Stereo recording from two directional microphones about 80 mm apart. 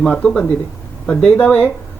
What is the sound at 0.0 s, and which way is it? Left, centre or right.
Speech, centre.